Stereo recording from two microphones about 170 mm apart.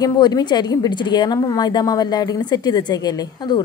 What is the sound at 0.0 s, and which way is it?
A woman's voice, 25° left (ahead or behind).